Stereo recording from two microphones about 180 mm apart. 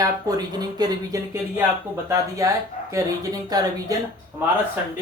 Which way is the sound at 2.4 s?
20° right (ahead or behind).